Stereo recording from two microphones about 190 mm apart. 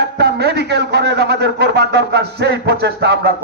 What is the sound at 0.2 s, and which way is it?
A man's voice, 60° right (ahead or behind).